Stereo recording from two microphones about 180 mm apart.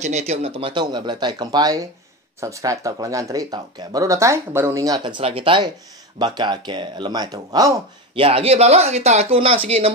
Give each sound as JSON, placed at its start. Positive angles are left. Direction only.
{"t": 0.0, "sound": "speech", "side_deg": -40}